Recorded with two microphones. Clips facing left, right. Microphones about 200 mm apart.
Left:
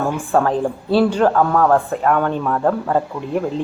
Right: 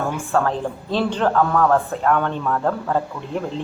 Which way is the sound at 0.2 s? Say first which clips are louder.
Left 4 dB; 15° left (ahead or behind).